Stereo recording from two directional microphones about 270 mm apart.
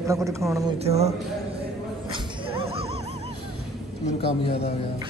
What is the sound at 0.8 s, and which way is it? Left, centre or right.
Speech, right.